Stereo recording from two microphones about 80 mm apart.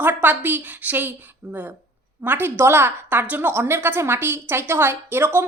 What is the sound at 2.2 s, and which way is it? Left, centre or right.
A woman's voice, right.